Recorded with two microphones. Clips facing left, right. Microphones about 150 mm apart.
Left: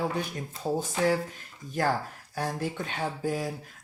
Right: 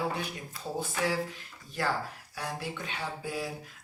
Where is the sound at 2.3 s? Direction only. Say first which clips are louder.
Left 6 dB; 45° left (ahead or behind).